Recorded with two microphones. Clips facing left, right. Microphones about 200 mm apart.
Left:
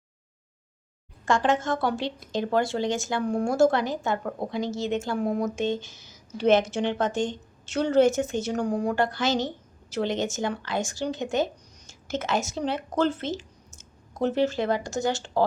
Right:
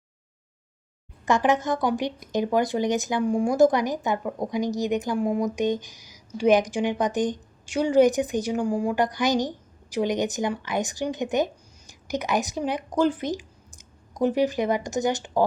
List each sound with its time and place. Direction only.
1.2 s speech: 20° right (ahead or behind)